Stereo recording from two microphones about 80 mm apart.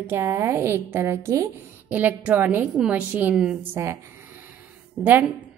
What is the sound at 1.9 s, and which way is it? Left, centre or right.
A woman's voice, right.